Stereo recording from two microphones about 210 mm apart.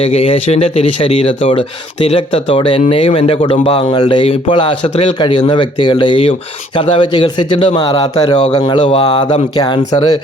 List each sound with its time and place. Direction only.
0.0 s speech: 25° left (ahead or behind)